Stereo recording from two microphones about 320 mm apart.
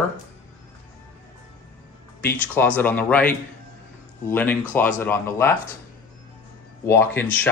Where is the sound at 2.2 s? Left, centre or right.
Centre.